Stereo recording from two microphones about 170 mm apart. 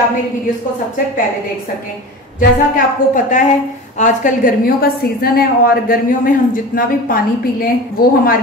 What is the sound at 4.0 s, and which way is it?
A woman's voice, 50° left (ahead or behind).